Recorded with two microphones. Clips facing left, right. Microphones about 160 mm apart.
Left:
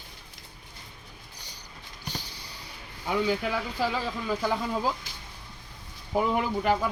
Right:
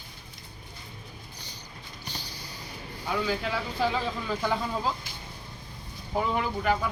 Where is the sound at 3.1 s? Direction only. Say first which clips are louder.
Left 2 dB; 15° left (ahead or behind).